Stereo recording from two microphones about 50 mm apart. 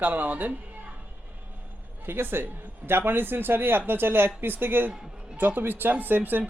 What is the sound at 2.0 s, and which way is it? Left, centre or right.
A man's voice, right.